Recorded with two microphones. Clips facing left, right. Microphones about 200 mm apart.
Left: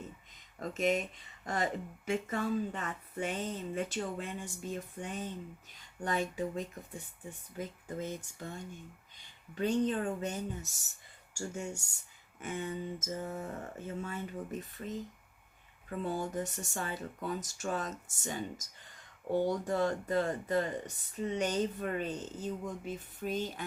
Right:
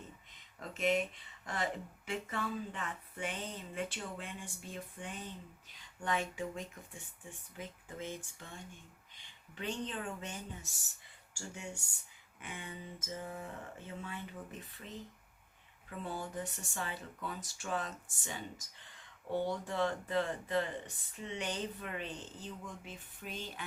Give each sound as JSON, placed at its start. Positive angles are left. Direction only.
{"t": 0.6, "sound": "speech", "side_deg": 40}